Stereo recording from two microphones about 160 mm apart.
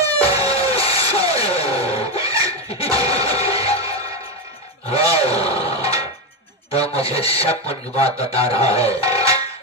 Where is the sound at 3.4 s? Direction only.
40° left (ahead or behind).